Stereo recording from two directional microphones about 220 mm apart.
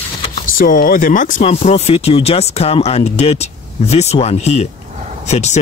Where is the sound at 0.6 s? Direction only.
40° left (ahead or behind).